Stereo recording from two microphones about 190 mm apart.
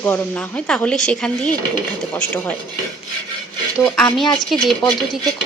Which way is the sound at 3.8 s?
5° left (ahead or behind).